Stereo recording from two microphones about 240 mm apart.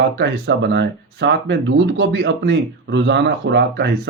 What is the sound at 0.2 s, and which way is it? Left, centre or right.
Speech, right.